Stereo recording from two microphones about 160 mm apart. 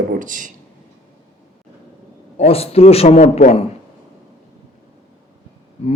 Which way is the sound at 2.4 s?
40° left (ahead or behind).